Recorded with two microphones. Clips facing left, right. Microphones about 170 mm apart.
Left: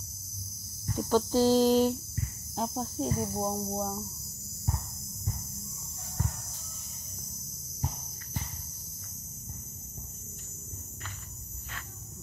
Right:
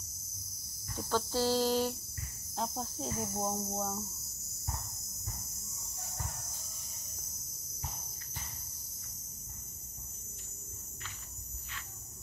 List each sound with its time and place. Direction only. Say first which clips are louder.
0.9 s cricket: left 7 dB; 15° left (ahead or behind)
2.5 s cricket: left 5 dB; 5° left (ahead or behind)